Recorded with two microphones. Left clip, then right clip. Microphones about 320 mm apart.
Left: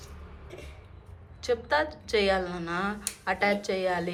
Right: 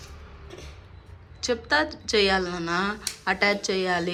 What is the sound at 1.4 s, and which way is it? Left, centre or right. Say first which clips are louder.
Speech: right 3 dB; centre.